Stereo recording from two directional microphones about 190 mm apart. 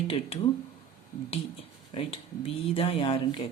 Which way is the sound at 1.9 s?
30° left (ahead or behind).